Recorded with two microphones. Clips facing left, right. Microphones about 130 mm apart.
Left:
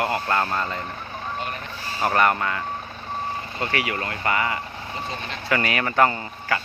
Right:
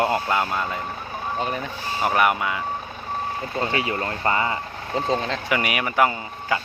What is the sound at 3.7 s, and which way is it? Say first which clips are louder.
Speech: right 2 dB; 30° right (ahead or behind).